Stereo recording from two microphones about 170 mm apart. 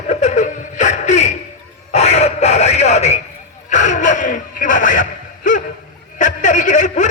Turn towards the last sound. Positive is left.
turn(degrees=45)  # may be behind; listen again after turning